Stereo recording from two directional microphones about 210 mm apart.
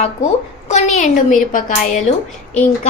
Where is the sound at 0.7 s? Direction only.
35° left (ahead or behind).